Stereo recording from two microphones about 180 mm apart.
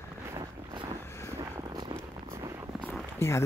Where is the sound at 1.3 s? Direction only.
20° right (ahead or behind).